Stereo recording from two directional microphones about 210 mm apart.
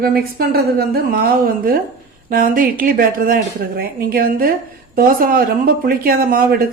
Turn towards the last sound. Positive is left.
turn(degrees=-45)  # may be behind; listen again after turning